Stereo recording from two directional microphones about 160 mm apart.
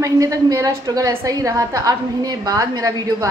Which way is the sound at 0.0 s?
20° right (ahead or behind).